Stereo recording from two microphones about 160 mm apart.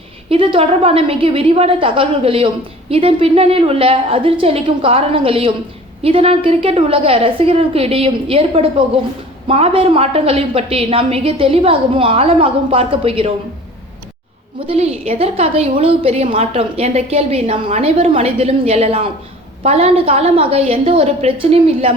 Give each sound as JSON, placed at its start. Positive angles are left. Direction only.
{"t": 0.3, "sound": "a woman's voice", "side_deg": -35}
{"t": 14.7, "sound": "a woman's voice", "side_deg": -40}